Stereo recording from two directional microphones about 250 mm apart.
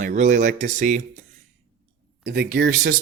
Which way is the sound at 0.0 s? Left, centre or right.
Right.